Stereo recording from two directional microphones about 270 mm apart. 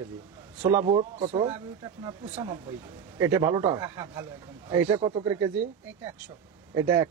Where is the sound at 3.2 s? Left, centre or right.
Centre.